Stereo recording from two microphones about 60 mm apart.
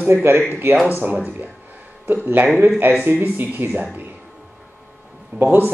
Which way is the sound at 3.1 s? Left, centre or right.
Right.